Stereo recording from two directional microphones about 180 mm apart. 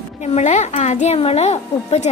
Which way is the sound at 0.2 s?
40° left (ahead or behind).